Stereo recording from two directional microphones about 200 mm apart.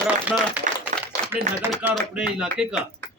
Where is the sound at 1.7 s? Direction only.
Centre (ahead or behind).